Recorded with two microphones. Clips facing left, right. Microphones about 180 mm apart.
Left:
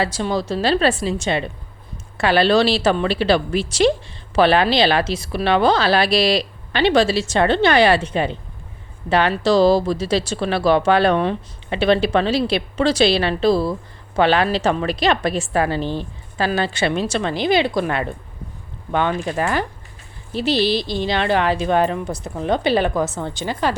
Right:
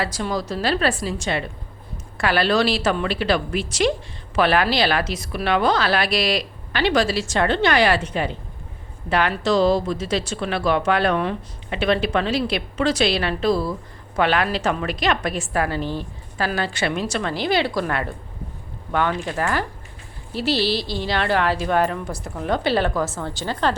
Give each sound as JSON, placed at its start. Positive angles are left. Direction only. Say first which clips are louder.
{"t": 0.0, "sound": "speech", "louder": "left 4 dB", "side_deg": 25}